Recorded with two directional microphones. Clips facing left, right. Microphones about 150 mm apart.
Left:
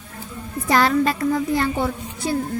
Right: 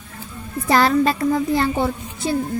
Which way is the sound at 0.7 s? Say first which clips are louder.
Right 2 dB; 30° right (ahead or behind).